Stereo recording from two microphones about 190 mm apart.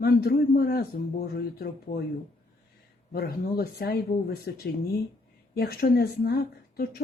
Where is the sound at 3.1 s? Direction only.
55° left (ahead or behind).